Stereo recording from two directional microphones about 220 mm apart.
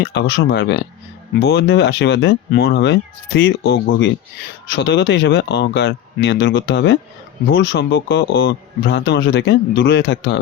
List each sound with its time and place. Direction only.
0.0 s speech: 50° left (ahead or behind)